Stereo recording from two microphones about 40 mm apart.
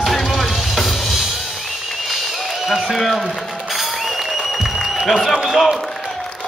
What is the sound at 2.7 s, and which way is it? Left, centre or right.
Speech, centre.